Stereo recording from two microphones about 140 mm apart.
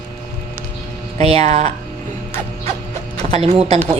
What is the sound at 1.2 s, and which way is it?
Speech, 50° right (ahead or behind).